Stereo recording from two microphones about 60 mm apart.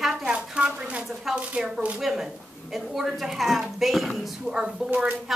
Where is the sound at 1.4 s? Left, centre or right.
Right.